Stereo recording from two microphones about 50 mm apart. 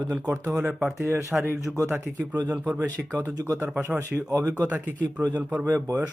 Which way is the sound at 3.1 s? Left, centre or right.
Right.